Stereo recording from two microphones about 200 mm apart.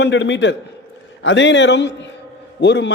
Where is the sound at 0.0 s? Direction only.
60° left (ahead or behind).